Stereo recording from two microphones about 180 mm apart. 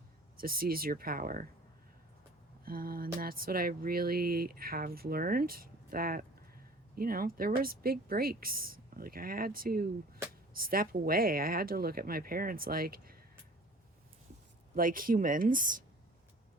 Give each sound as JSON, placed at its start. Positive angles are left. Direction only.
{"t": 0.3, "sound": "speech", "side_deg": -55}
{"t": 2.6, "sound": "speech", "side_deg": -55}
{"t": 14.8, "sound": "speech", "side_deg": -50}